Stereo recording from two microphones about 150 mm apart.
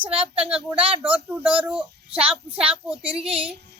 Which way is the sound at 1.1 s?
10° right (ahead or behind).